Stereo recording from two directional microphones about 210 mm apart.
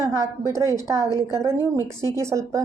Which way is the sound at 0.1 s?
15° right (ahead or behind).